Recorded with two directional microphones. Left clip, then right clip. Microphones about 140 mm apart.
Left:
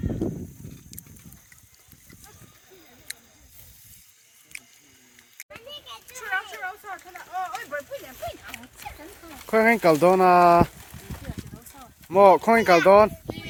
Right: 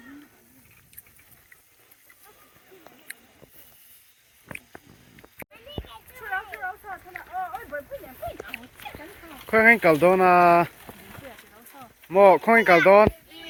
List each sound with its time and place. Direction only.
6.1 s a sound: 20° left (ahead or behind)
9.5 s speech: 20° left (ahead or behind)
11.8 s speech: 15° left (ahead or behind)